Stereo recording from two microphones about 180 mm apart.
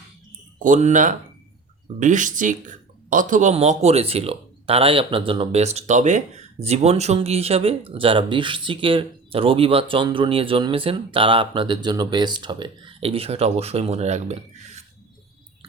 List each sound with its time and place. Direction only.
0.6 s speech: 45° right (ahead or behind)